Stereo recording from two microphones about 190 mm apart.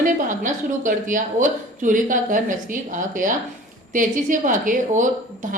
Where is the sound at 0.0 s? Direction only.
40° right (ahead or behind).